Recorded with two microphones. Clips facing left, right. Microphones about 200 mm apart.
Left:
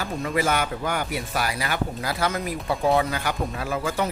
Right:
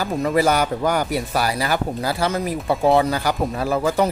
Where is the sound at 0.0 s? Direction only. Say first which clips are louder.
Right 6 dB; 40° right (ahead or behind).